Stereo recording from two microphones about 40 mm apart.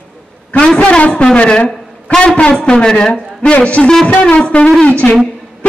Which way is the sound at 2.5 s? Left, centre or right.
Centre.